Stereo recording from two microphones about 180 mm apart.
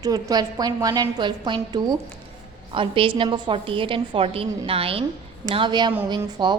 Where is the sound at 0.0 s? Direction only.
20° right (ahead or behind).